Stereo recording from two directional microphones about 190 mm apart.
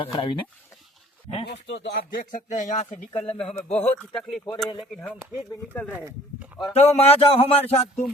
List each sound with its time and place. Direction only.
0.0 s speech: 25° left (ahead or behind)
1.5 s speech: 65° left (ahead or behind); by 3.0 s 40° left (ahead or behind)
3.2 s speech: 5° left (ahead or behind)
6.7 s a sound: 35° left (ahead or behind)